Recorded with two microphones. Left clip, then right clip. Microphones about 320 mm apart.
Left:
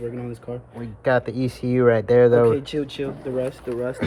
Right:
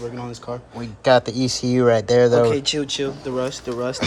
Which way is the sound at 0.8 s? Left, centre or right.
Centre.